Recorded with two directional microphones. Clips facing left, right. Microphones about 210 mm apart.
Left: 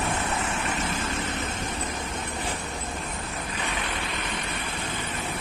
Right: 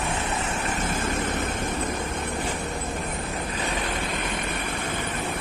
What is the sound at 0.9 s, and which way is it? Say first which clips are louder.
Vehicle: right 3 dB; 50° right (ahead or behind).